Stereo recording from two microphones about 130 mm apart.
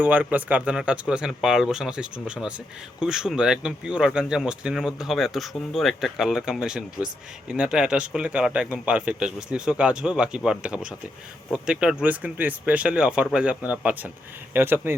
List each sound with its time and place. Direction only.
0.0 s speech: 10° right (ahead or behind)